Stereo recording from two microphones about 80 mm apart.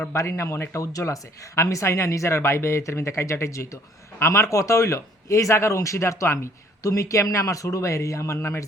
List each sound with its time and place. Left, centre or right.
0.1 s speech: left